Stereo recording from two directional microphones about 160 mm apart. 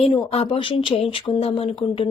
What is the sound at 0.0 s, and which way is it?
Speech, 35° left (ahead or behind).